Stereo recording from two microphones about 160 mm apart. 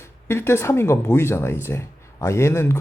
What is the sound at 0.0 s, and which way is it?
Speech, 15° left (ahead or behind).